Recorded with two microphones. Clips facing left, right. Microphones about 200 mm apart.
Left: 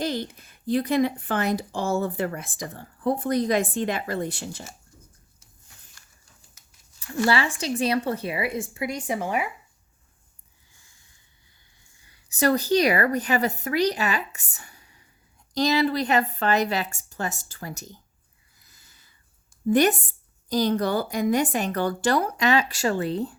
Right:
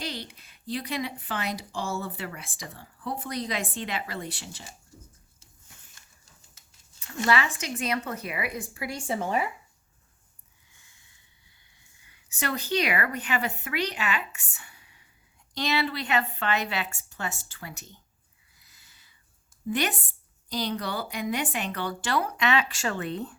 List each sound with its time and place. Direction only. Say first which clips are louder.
0.0 s speech: left 8 dB; 50° left (ahead or behind)
7.3 s speech: left 2 dB; 30° left (ahead or behind); by 9.5 s 10° left (ahead or behind)
12.0 s a woman's voice: left 10 dB; 40° left (ahead or behind)
18.6 s a sound: left 3 dB; 45° left (ahead or behind)
19.6 s speech: left 9 dB; 45° left (ahead or behind)